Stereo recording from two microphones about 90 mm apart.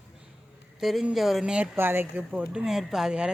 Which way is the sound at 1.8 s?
25° right (ahead or behind).